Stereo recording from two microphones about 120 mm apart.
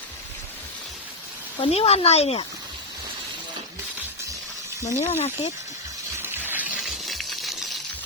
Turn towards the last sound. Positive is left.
turn(degrees=0)  # may be behind; listen again after turning